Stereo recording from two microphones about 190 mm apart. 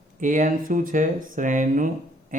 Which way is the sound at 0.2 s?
45° right (ahead or behind).